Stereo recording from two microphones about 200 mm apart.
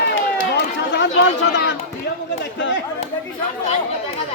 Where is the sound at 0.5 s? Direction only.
65° left (ahead or behind).